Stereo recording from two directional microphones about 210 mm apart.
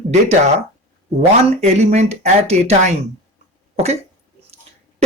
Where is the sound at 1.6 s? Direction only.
30° right (ahead or behind).